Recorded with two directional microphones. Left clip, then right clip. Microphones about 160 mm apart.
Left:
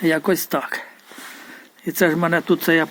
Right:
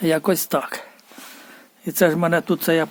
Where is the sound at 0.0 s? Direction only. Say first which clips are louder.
Left 1 dB; 35° right (ahead or behind).